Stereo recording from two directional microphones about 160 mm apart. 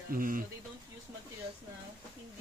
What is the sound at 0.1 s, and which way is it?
Speech, 60° right (ahead or behind).